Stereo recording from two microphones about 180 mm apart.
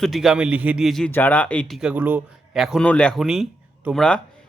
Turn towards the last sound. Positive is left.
turn(degrees=5)  # may be behind; listen again after turning